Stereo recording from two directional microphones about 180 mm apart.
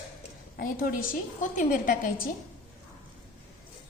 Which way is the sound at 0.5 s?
55° left (ahead or behind).